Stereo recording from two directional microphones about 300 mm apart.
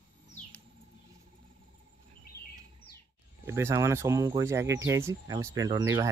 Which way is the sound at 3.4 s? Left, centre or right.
Centre.